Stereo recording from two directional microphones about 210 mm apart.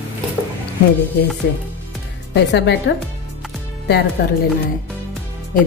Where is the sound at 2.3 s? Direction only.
55° left (ahead or behind).